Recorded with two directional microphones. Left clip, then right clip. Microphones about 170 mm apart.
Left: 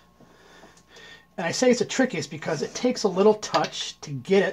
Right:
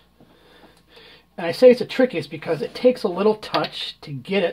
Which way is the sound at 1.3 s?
25° left (ahead or behind).